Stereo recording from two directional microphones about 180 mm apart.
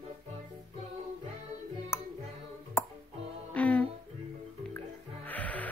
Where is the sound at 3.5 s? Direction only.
5° left (ahead or behind).